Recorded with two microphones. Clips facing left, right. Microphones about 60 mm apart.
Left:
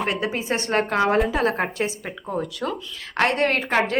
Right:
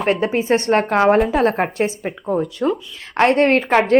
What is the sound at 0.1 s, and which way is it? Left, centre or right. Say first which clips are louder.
Speech: right 8 dB; right.